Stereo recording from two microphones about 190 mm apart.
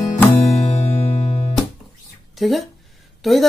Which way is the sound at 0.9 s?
35° left (ahead or behind).